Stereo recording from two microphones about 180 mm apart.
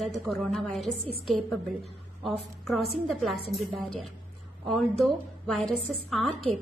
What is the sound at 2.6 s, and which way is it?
A woman's voice, centre (ahead or behind).